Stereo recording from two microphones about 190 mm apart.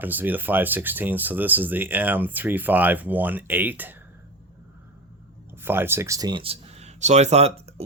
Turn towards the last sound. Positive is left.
turn(degrees=-35)  # may be behind; listen again after turning